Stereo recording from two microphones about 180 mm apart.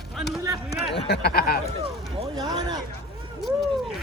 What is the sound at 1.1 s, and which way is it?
Speech, 60° left (ahead or behind).